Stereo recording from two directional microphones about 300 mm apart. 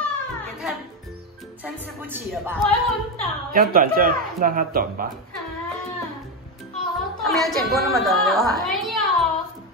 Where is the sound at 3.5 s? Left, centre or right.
Right.